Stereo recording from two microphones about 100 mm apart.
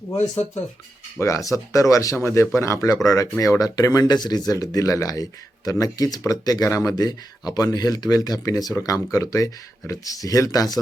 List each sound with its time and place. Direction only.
1.2 s speech: 30° left (ahead or behind)